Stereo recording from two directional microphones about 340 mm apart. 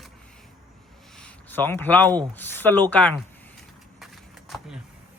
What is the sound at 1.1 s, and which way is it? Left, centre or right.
Speech, centre.